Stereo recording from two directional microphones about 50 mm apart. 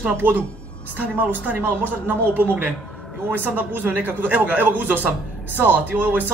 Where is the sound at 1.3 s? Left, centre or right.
Right.